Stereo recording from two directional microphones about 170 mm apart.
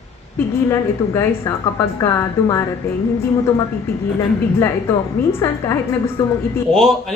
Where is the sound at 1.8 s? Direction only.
15° left (ahead or behind).